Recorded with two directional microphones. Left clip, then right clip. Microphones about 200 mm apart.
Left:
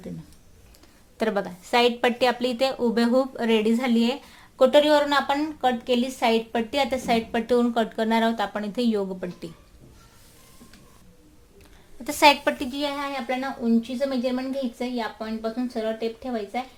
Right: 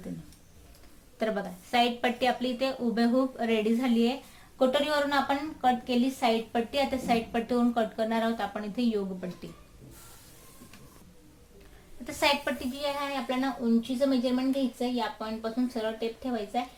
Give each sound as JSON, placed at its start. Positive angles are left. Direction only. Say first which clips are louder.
{"t": 1.2, "sound": "a woman's voice", "louder": "left 5 dB", "side_deg": 40}
{"t": 12.0, "sound": "a woman's voice", "louder": "left 9 dB", "side_deg": 45}
{"t": 13.2, "sound": "speech", "louder": "left 3 dB", "side_deg": 30}